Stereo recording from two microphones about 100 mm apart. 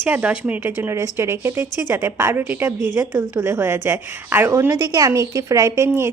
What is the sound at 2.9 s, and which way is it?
A woman's voice, 35° right (ahead or behind).